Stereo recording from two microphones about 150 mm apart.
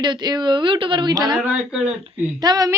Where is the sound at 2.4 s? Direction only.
25° right (ahead or behind).